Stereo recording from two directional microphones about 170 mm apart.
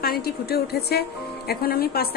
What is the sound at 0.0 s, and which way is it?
A woman's voice, 65° left (ahead or behind).